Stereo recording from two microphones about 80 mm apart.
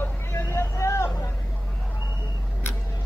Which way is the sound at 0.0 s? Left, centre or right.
Left.